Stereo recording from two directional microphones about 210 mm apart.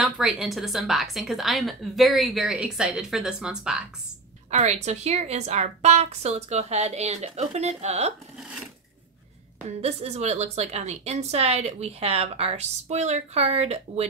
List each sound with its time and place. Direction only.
0.0 s a woman's voice: centre (ahead or behind)
4.5 s a woman's voice: 30° right (ahead or behind)
9.8 s a woman's voice: 30° right (ahead or behind)